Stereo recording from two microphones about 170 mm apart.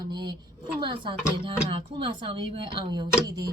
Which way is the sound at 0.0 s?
25° right (ahead or behind).